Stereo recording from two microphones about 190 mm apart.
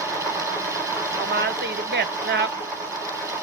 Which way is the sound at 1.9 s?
60° right (ahead or behind).